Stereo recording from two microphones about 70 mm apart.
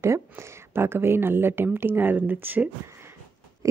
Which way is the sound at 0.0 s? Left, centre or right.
Right.